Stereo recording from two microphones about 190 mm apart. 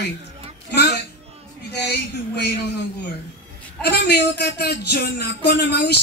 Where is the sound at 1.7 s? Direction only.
60° left (ahead or behind).